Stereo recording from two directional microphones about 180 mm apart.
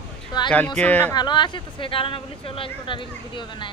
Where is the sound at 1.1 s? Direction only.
25° left (ahead or behind).